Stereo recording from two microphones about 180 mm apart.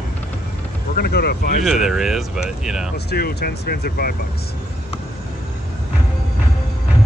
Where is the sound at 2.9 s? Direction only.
60° left (ahead or behind).